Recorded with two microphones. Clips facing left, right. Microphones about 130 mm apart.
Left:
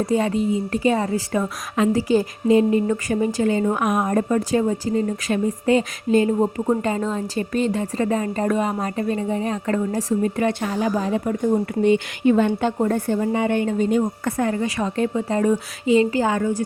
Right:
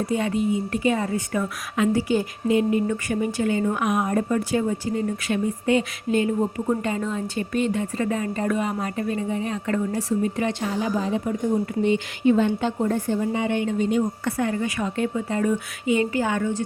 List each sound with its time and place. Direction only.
0.0 s a woman's voice: 35° left (ahead or behind)